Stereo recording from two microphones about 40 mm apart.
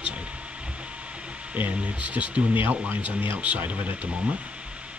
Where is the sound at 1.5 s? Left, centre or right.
Right.